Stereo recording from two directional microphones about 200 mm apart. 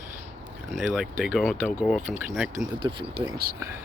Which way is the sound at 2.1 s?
5° right (ahead or behind).